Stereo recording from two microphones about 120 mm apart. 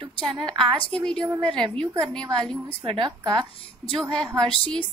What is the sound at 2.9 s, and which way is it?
Speech, 40° right (ahead or behind).